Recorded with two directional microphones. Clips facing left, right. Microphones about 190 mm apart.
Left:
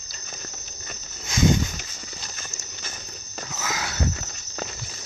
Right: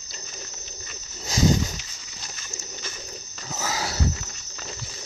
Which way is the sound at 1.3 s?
35° right (ahead or behind).